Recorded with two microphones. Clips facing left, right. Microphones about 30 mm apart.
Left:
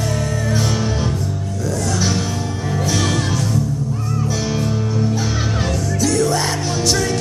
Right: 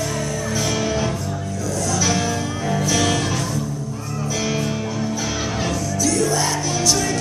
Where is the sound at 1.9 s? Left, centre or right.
Left.